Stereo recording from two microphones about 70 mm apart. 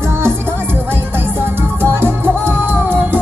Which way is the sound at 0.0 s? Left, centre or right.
Right.